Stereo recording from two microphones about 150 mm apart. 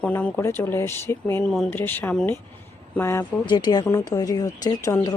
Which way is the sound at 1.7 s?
15° left (ahead or behind).